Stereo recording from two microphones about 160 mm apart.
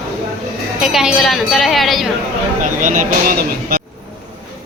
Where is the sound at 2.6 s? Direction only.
55° right (ahead or behind).